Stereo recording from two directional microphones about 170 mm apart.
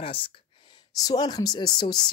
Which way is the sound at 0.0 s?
30° left (ahead or behind).